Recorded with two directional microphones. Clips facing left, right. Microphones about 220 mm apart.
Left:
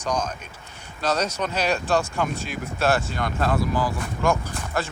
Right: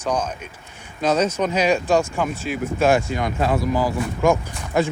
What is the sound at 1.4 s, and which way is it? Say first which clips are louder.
Speech: right 5 dB; 10° right (ahead or behind).